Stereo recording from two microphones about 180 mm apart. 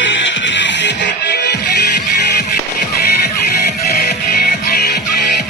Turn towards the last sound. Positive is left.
turn(degrees=60)  # may be behind; listen again after turning